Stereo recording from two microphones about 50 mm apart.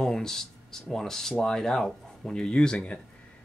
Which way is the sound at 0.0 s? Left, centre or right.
Centre.